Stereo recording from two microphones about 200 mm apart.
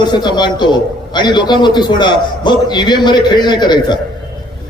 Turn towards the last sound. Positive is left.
turn(degrees=20)  # may be behind; listen again after turning